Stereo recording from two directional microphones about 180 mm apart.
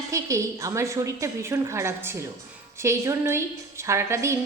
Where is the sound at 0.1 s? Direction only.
15° right (ahead or behind).